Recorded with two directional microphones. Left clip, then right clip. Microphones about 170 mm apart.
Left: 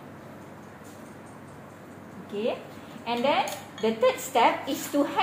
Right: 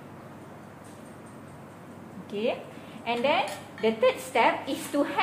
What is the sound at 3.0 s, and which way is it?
Speech, 25° left (ahead or behind).